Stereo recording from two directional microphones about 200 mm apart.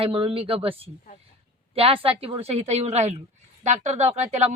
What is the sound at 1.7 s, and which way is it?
Speech, 30° right (ahead or behind).